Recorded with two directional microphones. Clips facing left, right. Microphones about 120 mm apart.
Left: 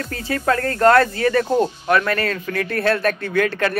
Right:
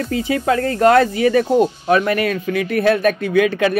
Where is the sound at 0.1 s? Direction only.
15° right (ahead or behind).